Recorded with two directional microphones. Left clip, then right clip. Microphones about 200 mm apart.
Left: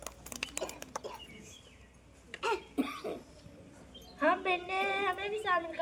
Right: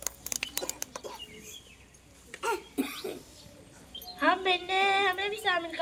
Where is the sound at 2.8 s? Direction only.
45° left (ahead or behind).